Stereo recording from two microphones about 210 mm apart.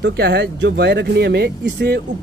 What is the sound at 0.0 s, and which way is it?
A man's voice, 55° right (ahead or behind).